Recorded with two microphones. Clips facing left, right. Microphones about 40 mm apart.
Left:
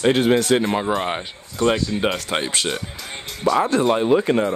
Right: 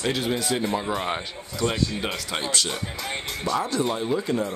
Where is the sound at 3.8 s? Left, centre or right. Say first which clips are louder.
Left 8 dB; left.